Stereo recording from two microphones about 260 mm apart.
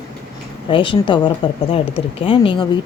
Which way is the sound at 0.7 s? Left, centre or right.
Centre.